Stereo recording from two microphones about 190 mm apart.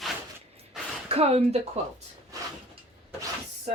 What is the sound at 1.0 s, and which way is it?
Speech, 30° right (ahead or behind).